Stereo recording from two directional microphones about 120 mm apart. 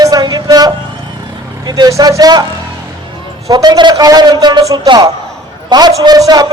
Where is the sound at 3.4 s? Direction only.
35° right (ahead or behind).